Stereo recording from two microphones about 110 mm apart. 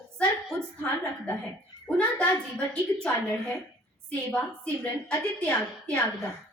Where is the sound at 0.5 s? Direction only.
10° left (ahead or behind).